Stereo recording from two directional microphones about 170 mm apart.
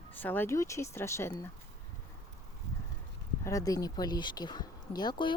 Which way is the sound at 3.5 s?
20° left (ahead or behind).